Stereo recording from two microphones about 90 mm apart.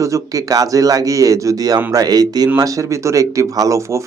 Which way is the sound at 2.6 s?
35° right (ahead or behind).